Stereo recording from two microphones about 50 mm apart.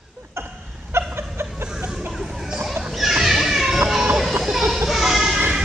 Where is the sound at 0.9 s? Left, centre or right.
Right.